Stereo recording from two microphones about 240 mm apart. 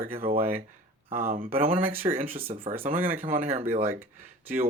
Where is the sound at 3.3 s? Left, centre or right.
Right.